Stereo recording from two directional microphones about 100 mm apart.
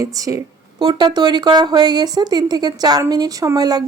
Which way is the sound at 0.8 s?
50° right (ahead or behind).